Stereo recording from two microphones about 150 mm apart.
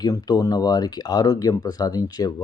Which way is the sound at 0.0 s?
25° left (ahead or behind).